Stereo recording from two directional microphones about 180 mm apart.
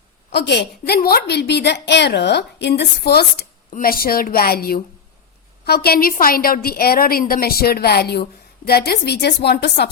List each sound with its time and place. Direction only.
0.3 s a woman's voice: 70° left (ahead or behind)
3.7 s a woman's voice: 50° left (ahead or behind)